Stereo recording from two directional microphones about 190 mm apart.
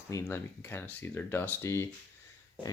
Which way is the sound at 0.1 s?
15° left (ahead or behind).